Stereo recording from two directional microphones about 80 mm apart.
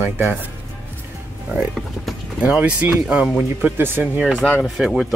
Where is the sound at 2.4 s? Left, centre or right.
Centre.